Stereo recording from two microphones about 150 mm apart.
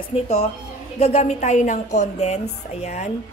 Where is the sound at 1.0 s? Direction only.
45° left (ahead or behind).